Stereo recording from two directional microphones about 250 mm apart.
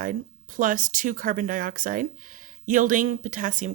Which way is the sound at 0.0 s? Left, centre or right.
Right.